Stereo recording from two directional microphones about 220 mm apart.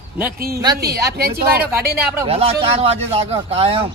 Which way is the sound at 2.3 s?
25° right (ahead or behind).